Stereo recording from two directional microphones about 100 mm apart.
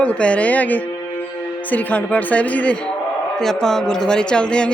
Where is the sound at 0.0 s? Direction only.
10° left (ahead or behind).